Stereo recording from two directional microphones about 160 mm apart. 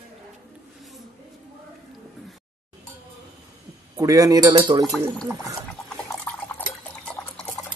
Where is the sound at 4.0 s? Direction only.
20° right (ahead or behind).